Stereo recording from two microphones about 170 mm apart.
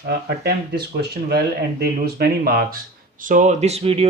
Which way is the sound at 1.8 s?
65° right (ahead or behind).